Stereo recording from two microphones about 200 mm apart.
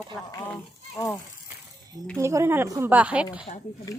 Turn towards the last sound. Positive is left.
turn(degrees=-5)  # may be behind; listen again after turning